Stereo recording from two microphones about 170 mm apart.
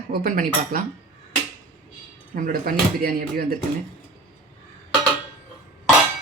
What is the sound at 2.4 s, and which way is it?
Speech, 55° right (ahead or behind).